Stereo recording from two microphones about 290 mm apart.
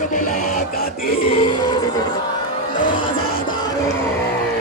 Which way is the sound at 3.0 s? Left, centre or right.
Centre.